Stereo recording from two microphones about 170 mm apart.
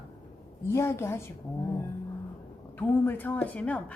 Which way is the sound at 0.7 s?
15° left (ahead or behind).